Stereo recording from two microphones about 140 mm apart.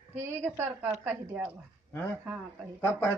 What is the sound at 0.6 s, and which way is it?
Speech, 15° right (ahead or behind).